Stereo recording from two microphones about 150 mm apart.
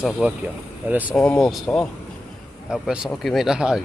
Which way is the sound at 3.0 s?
Centre (ahead or behind).